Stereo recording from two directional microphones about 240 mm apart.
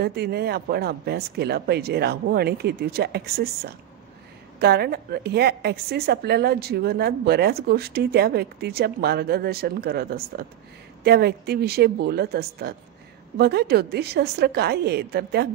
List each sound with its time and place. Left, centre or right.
0.0 s a woman's voice: right